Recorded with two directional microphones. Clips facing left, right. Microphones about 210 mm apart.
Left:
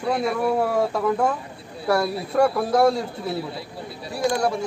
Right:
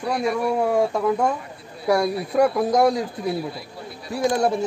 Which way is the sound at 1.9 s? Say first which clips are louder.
Right 1 dB; 15° right (ahead or behind).